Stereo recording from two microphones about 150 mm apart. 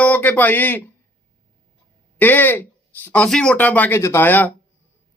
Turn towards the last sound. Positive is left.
turn(degrees=10)  # may be behind; listen again after turning